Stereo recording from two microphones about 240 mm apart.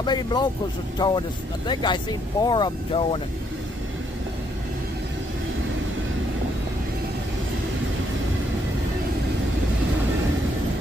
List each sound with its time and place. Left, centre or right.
0.0 s speech: centre